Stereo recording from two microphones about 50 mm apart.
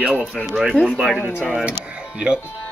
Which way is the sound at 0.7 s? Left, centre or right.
Left.